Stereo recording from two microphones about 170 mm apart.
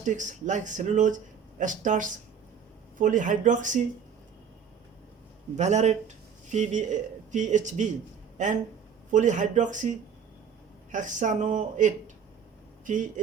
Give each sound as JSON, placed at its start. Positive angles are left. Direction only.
{"t": 0.0, "sound": "speech", "side_deg": -45}
{"t": 5.5, "sound": "speech", "side_deg": -45}